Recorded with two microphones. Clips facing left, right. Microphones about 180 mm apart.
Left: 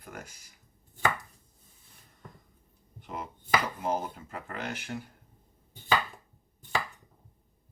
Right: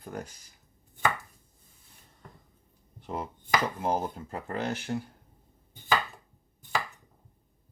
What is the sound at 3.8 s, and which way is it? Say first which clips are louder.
Speech: right 2 dB; 35° right (ahead or behind).